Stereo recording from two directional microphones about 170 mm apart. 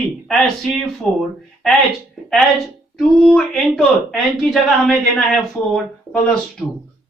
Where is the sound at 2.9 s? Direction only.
5° left (ahead or behind).